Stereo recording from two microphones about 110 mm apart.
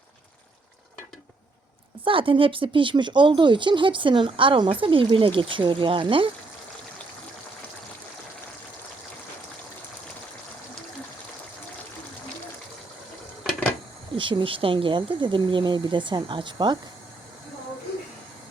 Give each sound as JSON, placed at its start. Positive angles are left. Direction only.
{"t": 2.0, "sound": "speech", "side_deg": -55}
{"t": 14.2, "sound": "speech", "side_deg": -50}